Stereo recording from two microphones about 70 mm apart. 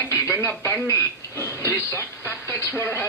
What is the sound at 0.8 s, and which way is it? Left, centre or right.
Speech, left.